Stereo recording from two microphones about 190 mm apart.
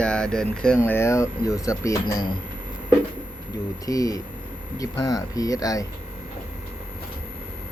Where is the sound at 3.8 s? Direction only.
20° left (ahead or behind).